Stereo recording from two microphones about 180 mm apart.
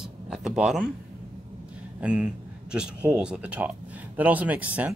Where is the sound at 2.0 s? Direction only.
5° right (ahead or behind).